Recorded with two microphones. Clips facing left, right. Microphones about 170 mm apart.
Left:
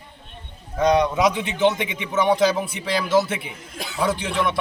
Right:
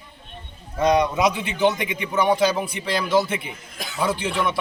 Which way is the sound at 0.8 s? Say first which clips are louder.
Left 1 dB; 5° right (ahead or behind).